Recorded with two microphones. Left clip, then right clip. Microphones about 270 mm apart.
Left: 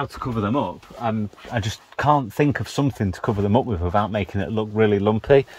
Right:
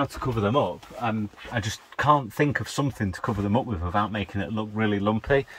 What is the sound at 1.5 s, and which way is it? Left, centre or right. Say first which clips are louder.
Speech: left 3 dB; left.